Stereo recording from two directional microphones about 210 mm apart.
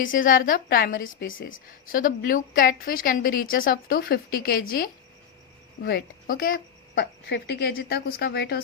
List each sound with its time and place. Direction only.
0.0 s a woman's voice: 40° left (ahead or behind)
5.8 s a woman's voice: 45° left (ahead or behind)